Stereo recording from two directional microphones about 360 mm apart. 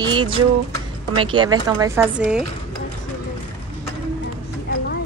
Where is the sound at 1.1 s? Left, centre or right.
Centre.